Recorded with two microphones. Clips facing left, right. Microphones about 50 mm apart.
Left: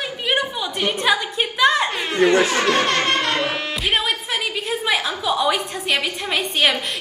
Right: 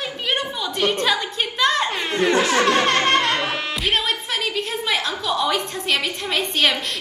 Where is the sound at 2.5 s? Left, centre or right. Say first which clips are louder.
Right 1 dB; right.